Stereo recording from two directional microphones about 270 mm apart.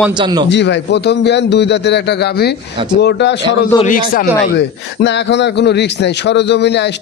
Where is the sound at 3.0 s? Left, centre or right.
Left.